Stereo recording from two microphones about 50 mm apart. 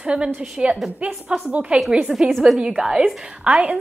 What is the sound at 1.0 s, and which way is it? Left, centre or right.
A woman's voice, right.